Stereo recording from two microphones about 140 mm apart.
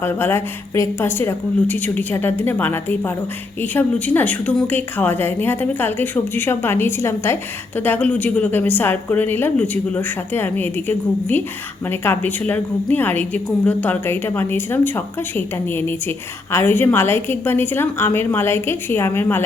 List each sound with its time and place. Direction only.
0.0 s a woman's voice: 15° left (ahead or behind)